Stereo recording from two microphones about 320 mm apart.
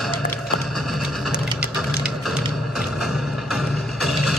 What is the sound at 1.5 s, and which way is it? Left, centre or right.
Mechanisms, centre.